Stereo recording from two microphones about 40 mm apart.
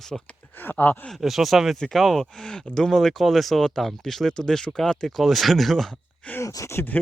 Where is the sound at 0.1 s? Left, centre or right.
Centre.